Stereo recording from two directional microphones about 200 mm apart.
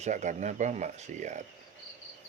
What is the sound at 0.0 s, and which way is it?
Speech, 35° right (ahead or behind).